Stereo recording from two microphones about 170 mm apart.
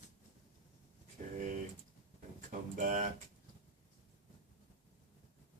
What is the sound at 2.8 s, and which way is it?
Speech, 50° right (ahead or behind).